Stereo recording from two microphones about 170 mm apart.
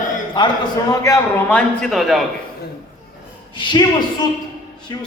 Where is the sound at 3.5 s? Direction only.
25° left (ahead or behind).